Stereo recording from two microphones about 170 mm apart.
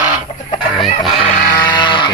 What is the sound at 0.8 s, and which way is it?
Music, centre (ahead or behind).